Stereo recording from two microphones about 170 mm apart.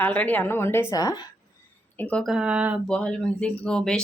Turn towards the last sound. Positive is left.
turn(degrees=5)  # may be behind; listen again after turning